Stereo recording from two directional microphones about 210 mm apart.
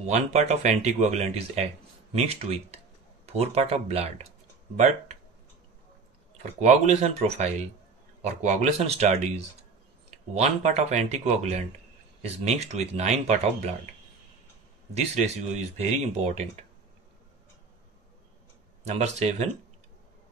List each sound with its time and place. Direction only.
0.0 s speech: 30° right (ahead or behind)
6.6 s speech: 35° right (ahead or behind)
15.0 s speech: 35° right (ahead or behind)
18.9 s speech: 35° right (ahead or behind)